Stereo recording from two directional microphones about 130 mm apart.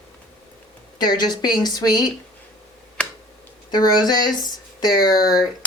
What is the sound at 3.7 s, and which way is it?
Speech, 30° left (ahead or behind).